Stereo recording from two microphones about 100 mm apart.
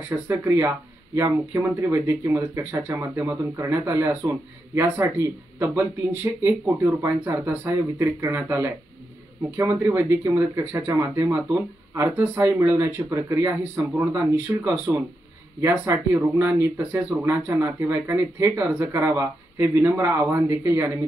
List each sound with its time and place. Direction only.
0.3 s speech: 25° right (ahead or behind)